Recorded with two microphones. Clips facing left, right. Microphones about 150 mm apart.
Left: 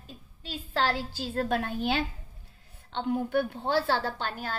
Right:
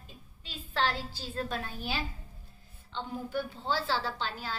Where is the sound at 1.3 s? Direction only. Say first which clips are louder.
Left 7 dB; 55° left (ahead or behind).